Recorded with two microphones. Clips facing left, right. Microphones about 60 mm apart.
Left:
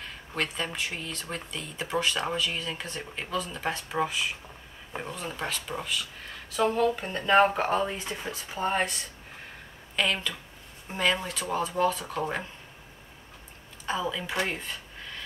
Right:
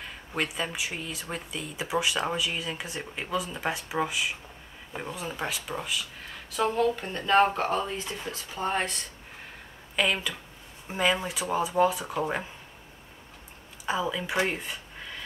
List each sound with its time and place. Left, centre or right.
0.0 s a sound: centre
0.7 s speech: centre
7.7 s speech: left
8.2 s speech: centre
13.8 s speech: centre